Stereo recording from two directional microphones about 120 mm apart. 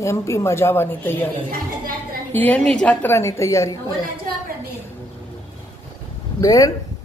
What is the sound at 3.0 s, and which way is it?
Speech, 25° left (ahead or behind).